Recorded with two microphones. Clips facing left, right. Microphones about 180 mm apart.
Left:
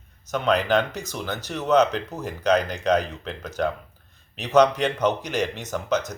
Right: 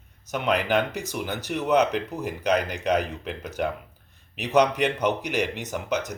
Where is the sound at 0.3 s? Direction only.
10° right (ahead or behind).